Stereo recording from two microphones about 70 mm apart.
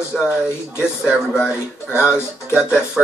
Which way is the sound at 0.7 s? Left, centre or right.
Left.